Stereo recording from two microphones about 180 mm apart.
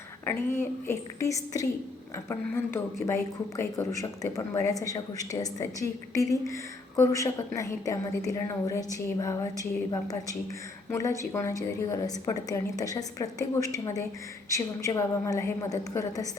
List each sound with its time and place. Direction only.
0.3 s a woman's voice: 10° left (ahead or behind)